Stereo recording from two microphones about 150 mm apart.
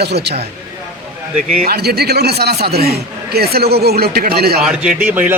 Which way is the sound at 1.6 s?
90° right.